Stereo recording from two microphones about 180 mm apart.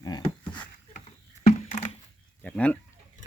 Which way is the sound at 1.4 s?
40° left (ahead or behind).